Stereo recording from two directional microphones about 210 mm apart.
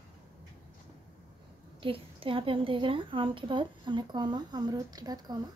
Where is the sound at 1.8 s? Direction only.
25° right (ahead or behind).